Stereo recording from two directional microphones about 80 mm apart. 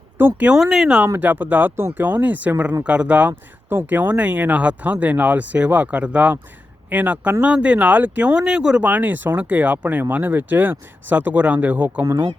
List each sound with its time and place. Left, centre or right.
0.2 s speech: right
0.4 s speech: centre
1.0 s speech: right
12.0 s speech: right